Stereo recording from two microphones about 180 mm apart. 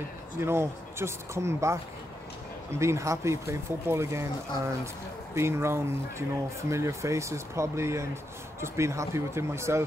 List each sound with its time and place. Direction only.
0.4 s speech: 15° right (ahead or behind)
5.3 s speech: 15° right (ahead or behind)